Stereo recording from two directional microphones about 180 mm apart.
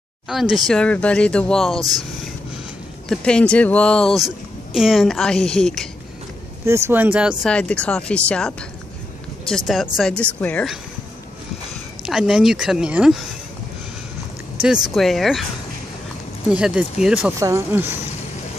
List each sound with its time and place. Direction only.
0.3 s speech: centre (ahead or behind)
3.1 s speech: 5° left (ahead or behind)
6.6 s speech: 15° right (ahead or behind)
7.4 s a woman's voice: 5° left (ahead or behind)
12.0 s speech: centre (ahead or behind)
14.6 s speech: centre (ahead or behind)
16.4 s speech: 5° right (ahead or behind)
17.4 s speech: 15° right (ahead or behind)